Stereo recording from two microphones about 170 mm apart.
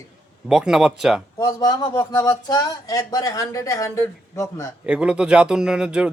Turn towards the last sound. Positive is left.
turn(degrees=-5)  # may be behind; listen again after turning